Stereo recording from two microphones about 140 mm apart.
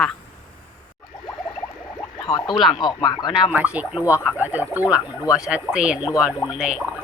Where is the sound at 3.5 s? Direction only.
10° right (ahead or behind).